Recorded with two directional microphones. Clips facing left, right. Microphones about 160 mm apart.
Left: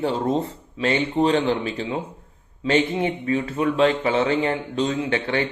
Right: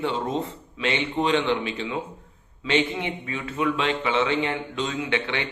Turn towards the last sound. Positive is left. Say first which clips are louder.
# left 4 dB
turn(degrees=40)  # may be behind; listen again after turning